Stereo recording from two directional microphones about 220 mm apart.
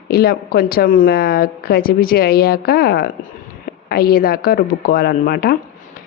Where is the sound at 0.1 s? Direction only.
45° left (ahead or behind).